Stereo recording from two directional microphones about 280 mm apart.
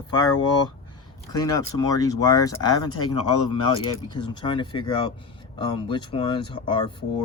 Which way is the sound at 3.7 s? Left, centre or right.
Centre.